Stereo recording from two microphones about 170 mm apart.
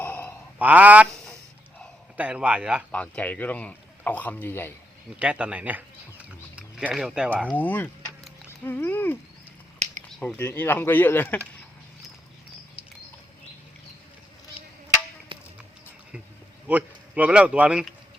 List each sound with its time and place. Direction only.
0.0 s sigh: 10° left (ahead or behind)
0.6 s speech: 10° right (ahead or behind)
2.1 s speech: 5° right (ahead or behind)
2.9 s speech: 10° left (ahead or behind)
5.2 s speech: 5° right (ahead or behind)
7.5 s speech: 10° left (ahead or behind)
9.7 s a sound: 40° right (ahead or behind)
10.2 s speech: 10° left (ahead or behind)
16.6 s speech: 10° right (ahead or behind)